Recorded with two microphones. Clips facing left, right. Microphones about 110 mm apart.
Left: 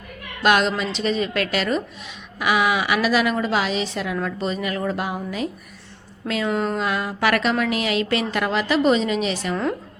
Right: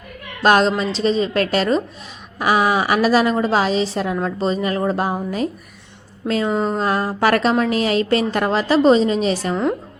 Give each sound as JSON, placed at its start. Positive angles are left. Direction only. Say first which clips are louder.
{"t": 0.4, "sound": "a woman's voice", "louder": "right 4 dB", "side_deg": -35}